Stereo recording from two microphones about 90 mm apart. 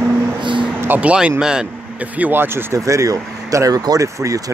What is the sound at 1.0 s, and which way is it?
Speech, 15° right (ahead or behind).